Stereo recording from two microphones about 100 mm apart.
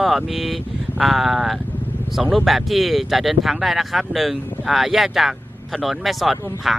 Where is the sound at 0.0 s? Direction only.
Centre (ahead or behind).